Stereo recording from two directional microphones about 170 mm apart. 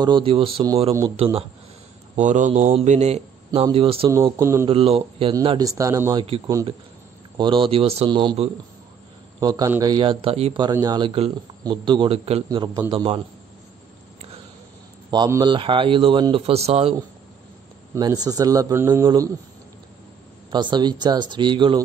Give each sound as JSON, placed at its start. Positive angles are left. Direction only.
{"t": 0.0, "sound": "speech", "side_deg": -30}
{"t": 2.1, "sound": "a man's voice", "side_deg": -45}
{"t": 4.1, "sound": "a man's voice", "side_deg": -15}
{"t": 4.6, "sound": "a man's voice", "side_deg": -35}
{"t": 6.2, "sound": "a man's voice", "side_deg": -35}
{"t": 12.4, "sound": "a man's voice", "side_deg": -25}
{"t": 12.9, "sound": "speech", "side_deg": -35}
{"t": 15.0, "sound": "speech", "side_deg": -25}
{"t": 17.9, "sound": "a man's voice", "side_deg": -25}
{"t": 20.5, "sound": "a man's voice", "side_deg": -25}